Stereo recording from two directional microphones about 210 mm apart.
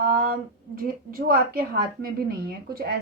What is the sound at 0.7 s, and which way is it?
Speech, 45° right (ahead or behind).